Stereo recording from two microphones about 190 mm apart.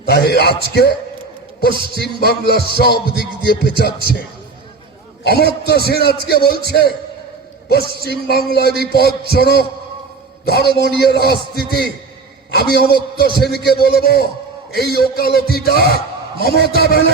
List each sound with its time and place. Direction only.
0.1 s a man's voice: 55° left (ahead or behind)
2.0 s a man's voice: 55° left (ahead or behind)
5.2 s a man's voice: 55° left (ahead or behind)